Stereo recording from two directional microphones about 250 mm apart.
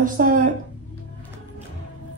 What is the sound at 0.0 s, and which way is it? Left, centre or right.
Speech, right.